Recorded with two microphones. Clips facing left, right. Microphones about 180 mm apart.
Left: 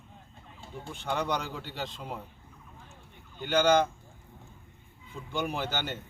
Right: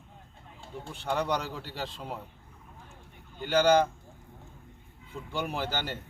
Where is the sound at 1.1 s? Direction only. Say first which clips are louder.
Right 1 dB; 5° right (ahead or behind).